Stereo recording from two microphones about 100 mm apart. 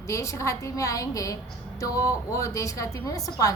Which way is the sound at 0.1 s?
30° left (ahead or behind).